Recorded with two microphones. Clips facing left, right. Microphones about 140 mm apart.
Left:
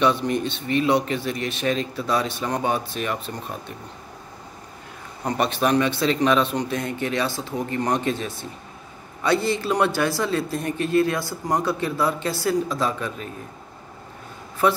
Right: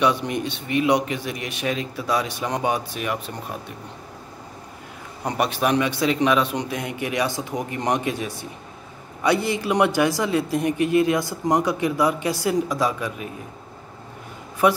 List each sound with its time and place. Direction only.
0.0 s a man's voice: 10° right (ahead or behind)
5.2 s a man's voice: 10° right (ahead or behind)
14.6 s a man's voice: 15° right (ahead or behind)